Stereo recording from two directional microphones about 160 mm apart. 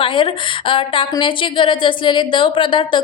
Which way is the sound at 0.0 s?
30° left (ahead or behind).